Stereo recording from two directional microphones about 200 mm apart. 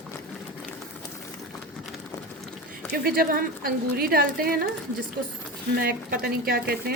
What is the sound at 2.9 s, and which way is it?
A woman's voice, 45° right (ahead or behind).